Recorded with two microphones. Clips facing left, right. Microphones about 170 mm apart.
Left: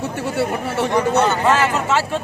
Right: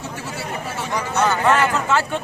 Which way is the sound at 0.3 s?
60° left (ahead or behind).